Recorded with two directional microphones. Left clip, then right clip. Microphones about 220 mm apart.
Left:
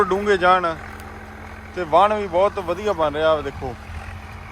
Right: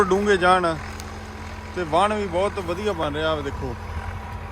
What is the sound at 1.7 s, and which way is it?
Speech, 10° right (ahead or behind).